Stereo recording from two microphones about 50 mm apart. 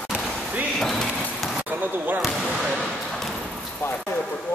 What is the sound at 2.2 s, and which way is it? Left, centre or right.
Speech, centre.